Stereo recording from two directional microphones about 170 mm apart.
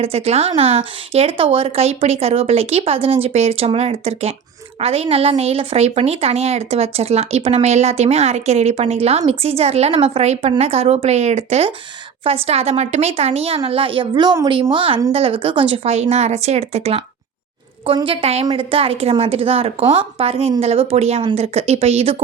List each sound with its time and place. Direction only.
0.0 s a woman's voice: 35° right (ahead or behind)